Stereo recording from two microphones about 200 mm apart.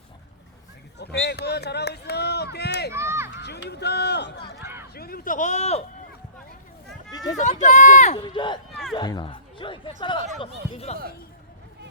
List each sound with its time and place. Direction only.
0.9 s run: 55° left (ahead or behind)
2.9 s run: 10° right (ahead or behind)
3.3 s speech: 55° left (ahead or behind); by 5.8 s 35° left (ahead or behind)
7.1 s a sound: 20° left (ahead or behind)
7.3 s speech: 35° left (ahead or behind)
8.2 s speech: 25° left (ahead or behind)